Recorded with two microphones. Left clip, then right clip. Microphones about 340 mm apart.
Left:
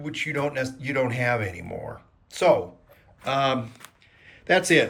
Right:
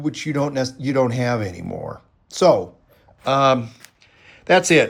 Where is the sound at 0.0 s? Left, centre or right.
Centre.